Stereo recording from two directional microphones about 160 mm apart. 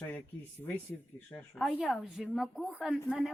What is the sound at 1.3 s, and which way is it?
Speech, 5° left (ahead or behind).